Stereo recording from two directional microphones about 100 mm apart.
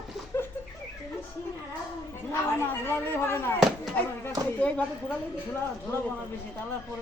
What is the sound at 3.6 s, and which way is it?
Speech, centre (ahead or behind).